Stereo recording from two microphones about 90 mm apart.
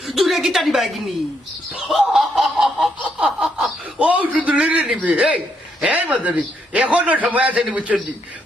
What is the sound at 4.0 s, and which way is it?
A man's voice, 15° right (ahead or behind).